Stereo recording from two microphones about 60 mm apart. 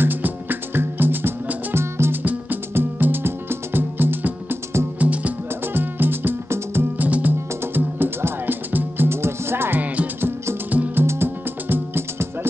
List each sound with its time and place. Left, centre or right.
0.0 s music: right
4.9 s music: right
5.7 s music: right
7.0 s music: right
7.6 s music: right
11.1 s music: right